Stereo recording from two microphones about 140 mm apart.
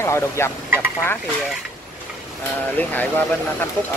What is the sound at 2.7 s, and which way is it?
Speech, 10° left (ahead or behind).